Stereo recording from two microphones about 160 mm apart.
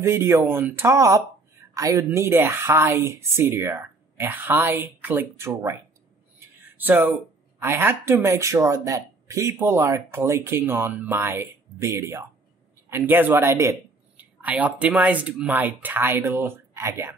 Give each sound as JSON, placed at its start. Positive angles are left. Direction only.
{"t": 0.0, "sound": "speech", "side_deg": -15}
{"t": 6.8, "sound": "speech", "side_deg": -10}